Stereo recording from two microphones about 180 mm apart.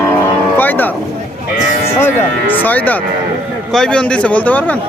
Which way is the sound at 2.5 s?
10° left (ahead or behind).